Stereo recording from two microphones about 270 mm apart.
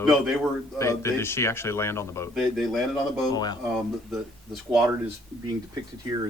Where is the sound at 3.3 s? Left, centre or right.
Centre.